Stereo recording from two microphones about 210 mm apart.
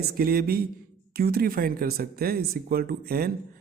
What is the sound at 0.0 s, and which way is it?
Speech, 45° right (ahead or behind).